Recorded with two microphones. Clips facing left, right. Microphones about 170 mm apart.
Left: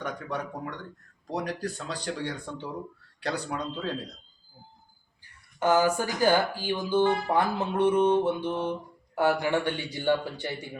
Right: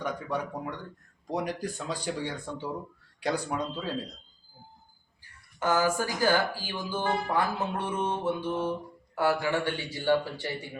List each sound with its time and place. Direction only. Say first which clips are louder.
0.0 s speech: right 1 dB; 10° right (ahead or behind)
5.5 s speech: left 3 dB; 20° left (ahead or behind)